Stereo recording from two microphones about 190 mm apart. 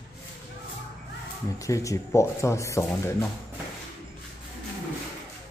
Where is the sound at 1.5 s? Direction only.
15° left (ahead or behind).